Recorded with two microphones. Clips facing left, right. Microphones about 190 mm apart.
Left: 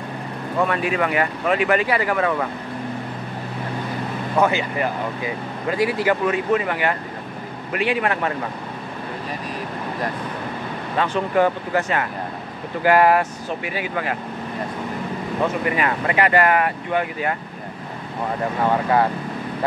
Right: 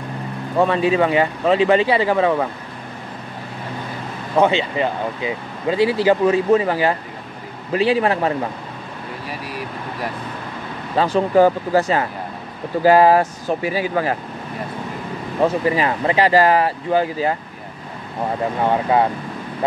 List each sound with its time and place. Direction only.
0.6 s speech: 25° right (ahead or behind)
4.4 s speech: 25° right (ahead or behind)
11.0 s speech: 35° right (ahead or behind)
15.4 s speech: 30° right (ahead or behind)
18.7 s speech: 20° right (ahead or behind)